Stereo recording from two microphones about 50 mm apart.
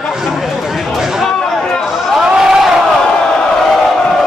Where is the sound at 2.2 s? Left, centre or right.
Centre.